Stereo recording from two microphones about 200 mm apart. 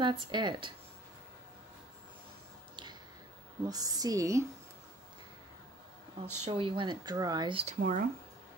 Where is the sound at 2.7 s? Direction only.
20° right (ahead or behind).